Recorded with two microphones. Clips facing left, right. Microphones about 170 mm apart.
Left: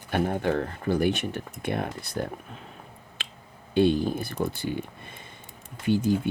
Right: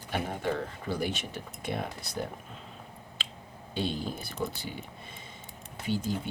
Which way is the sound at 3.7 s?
55° left (ahead or behind).